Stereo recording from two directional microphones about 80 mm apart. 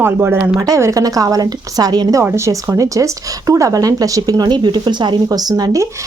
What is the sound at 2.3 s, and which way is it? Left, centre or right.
Speech, right.